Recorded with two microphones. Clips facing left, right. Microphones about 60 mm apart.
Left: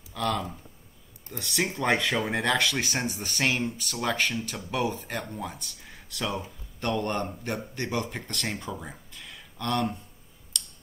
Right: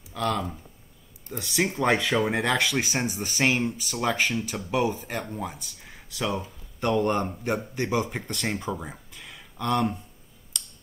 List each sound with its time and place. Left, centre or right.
0.1 s speech: centre
4.8 s speech: centre
8.9 s a sound: centre
10.5 s tick: centre